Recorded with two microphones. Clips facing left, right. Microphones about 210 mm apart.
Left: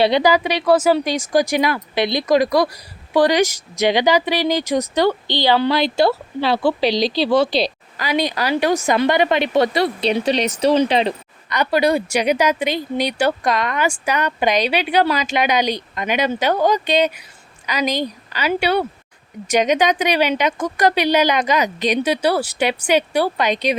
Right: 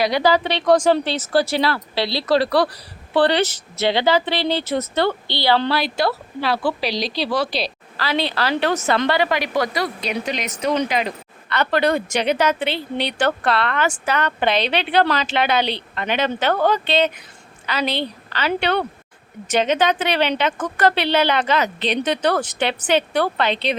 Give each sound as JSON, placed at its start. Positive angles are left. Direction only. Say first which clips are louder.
{"t": 0.2, "sound": "a woman's voice", "louder": "left 1 dB", "side_deg": 10}
{"t": 7.9, "sound": "a woman's voice", "louder": "left 2 dB", "side_deg": 15}
{"t": 11.4, "sound": "speech", "louder": "left 2 dB", "side_deg": 10}